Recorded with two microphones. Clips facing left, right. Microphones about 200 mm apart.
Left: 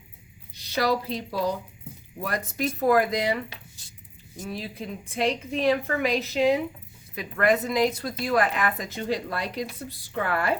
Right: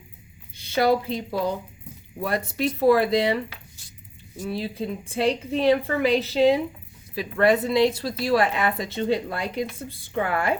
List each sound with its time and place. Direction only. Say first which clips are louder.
0.5 s a woman's voice: right 4 dB; 30° right (ahead or behind)
4.4 s a woman's voice: right 6 dB; 30° right (ahead or behind)